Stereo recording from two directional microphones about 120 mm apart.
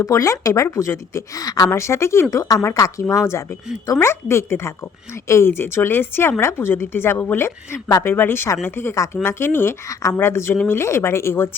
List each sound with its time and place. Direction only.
0.0 s a woman's voice: 25° left (ahead or behind)